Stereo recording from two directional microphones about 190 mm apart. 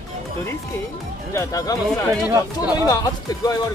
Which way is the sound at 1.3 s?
15° left (ahead or behind).